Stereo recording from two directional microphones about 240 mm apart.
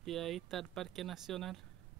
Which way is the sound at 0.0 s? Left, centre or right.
Centre.